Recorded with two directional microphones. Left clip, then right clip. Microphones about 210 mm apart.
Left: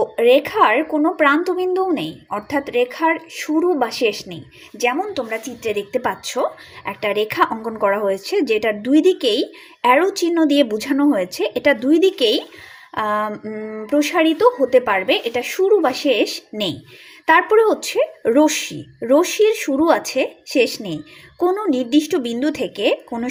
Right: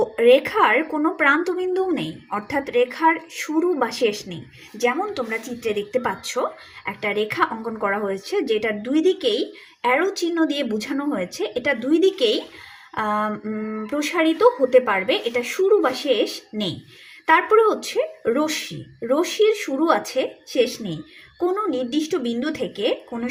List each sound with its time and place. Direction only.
0.0 s speech: 15° left (ahead or behind)